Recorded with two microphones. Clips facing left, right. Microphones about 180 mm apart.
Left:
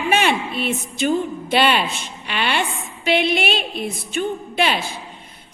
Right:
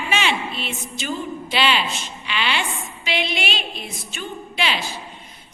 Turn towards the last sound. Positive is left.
turn(degrees=55)  # may be behind; listen again after turning